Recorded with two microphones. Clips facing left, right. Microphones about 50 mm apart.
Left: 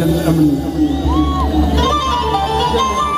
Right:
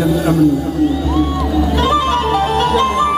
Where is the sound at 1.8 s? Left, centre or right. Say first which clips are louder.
Right 1 dB; centre.